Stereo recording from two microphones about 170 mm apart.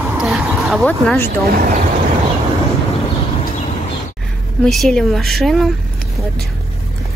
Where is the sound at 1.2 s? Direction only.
60° right (ahead or behind).